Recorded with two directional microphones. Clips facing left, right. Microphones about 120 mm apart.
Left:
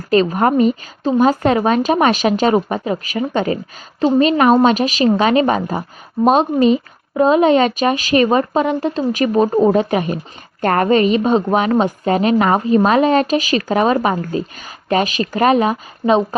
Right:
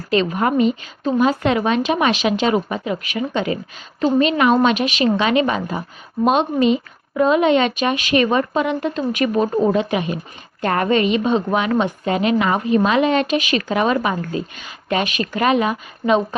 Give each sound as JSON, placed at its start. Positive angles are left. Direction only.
{"t": 0.1, "sound": "a woman's voice", "side_deg": 40}